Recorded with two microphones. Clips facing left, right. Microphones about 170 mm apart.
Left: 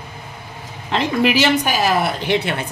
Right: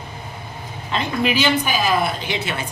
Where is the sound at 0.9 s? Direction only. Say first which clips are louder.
Left 4 dB; 75° left (ahead or behind).